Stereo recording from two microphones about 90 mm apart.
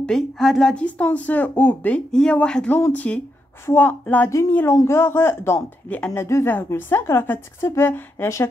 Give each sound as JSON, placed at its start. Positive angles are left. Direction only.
{"t": 0.0, "sound": "a woman's voice", "side_deg": 5}
{"t": 0.8, "sound": "a woman's voice", "side_deg": 15}